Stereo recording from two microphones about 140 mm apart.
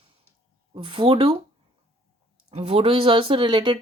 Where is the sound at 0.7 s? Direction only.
40° right (ahead or behind).